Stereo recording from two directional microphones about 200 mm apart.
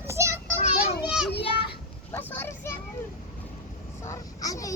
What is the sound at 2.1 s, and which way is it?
Children playing, 10° left (ahead or behind).